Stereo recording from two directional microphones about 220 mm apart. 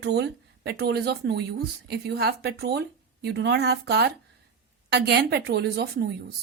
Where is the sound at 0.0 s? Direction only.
50° right (ahead or behind).